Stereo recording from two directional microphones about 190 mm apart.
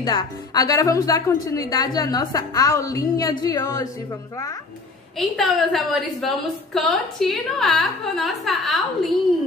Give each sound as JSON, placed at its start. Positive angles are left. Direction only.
{"t": 0.0, "sound": "a woman's voice", "side_deg": 20}
{"t": 5.3, "sound": "a woman's voice", "side_deg": 0}